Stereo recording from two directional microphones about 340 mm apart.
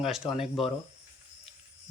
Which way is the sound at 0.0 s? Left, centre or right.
Centre.